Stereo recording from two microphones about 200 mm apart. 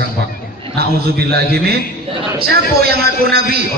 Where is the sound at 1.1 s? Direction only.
50° right (ahead or behind).